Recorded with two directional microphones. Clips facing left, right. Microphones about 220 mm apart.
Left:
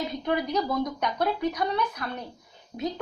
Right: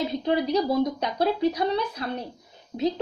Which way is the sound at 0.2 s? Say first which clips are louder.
Right 3 dB; 30° right (ahead or behind).